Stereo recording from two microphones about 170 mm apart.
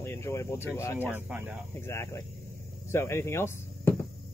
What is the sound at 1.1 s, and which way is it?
Speech, 10° right (ahead or behind).